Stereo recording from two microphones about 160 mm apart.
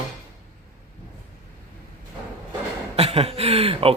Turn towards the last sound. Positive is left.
turn(degrees=-35)  # may be behind; listen again after turning